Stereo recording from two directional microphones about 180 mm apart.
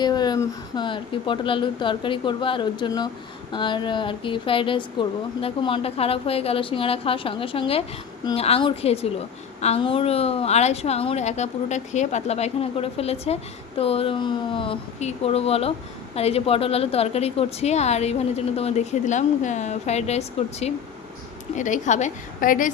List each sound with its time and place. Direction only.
0.0 s a woman's voice: 25° left (ahead or behind); by 22.7 s 50° left (ahead or behind)